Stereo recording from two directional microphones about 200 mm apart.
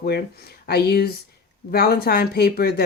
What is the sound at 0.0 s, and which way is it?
Speech, 50° left (ahead or behind).